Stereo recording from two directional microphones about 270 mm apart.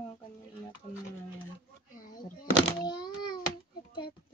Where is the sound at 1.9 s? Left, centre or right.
Left.